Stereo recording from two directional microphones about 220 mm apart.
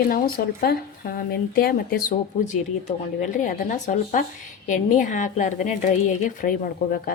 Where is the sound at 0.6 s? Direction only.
45° left (ahead or behind).